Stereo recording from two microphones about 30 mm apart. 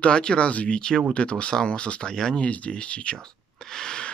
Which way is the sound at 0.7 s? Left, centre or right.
Left.